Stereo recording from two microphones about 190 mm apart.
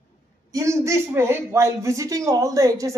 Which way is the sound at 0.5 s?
15° right (ahead or behind).